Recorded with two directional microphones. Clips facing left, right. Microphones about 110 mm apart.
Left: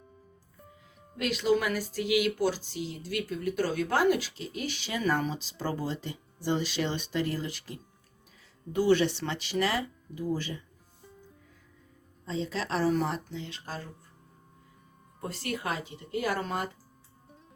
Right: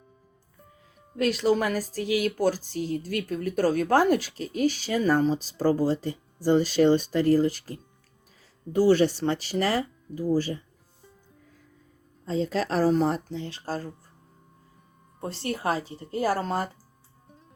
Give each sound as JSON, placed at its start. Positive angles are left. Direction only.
{"t": 1.1, "sound": "speech", "side_deg": -40}
{"t": 12.2, "sound": "a woman's voice", "side_deg": -45}
{"t": 15.2, "sound": "speech", "side_deg": -30}